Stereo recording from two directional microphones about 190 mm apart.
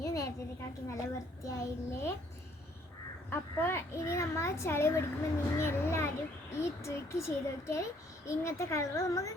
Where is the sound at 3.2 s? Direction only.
10° left (ahead or behind).